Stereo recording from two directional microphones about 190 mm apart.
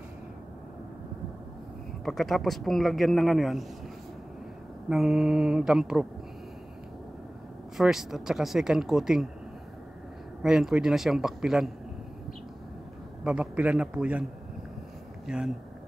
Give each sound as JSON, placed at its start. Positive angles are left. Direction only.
{"t": 2.0, "sound": "speech", "side_deg": 0}
{"t": 4.8, "sound": "speech", "side_deg": 0}
{"t": 7.7, "sound": "speech", "side_deg": 0}
{"t": 10.4, "sound": "speech", "side_deg": -5}
{"t": 13.2, "sound": "speech", "side_deg": -5}
{"t": 15.2, "sound": "speech", "side_deg": -5}